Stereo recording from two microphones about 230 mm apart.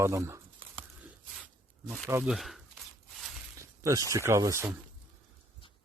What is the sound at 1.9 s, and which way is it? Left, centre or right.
Speech, centre.